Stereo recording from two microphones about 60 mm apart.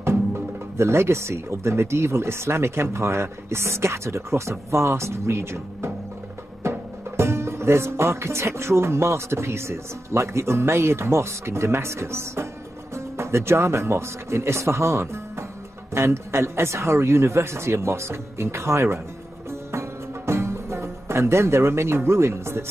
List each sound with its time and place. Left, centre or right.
0.0 s speech: right
6.6 s music: right
12.9 s speech: right
19.7 s music: right